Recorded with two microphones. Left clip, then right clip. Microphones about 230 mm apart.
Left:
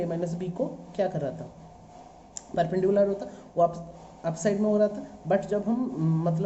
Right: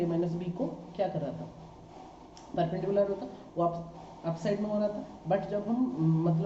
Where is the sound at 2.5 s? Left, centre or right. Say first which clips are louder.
Left 5 dB; left.